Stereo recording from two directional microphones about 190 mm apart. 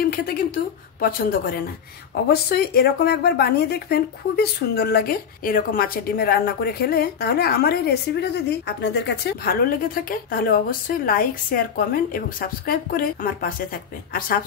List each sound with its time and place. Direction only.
1.0 s a woman's voice: 50° left (ahead or behind)